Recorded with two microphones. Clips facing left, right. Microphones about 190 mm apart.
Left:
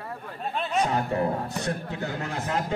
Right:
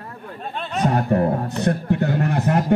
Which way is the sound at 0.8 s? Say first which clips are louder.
Right 9 dB; 60° right (ahead or behind).